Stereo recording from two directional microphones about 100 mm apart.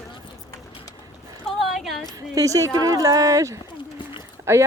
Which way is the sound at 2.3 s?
35° right (ahead or behind).